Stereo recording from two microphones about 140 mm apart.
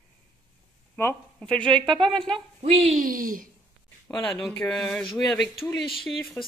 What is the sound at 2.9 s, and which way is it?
Speech, 80° right.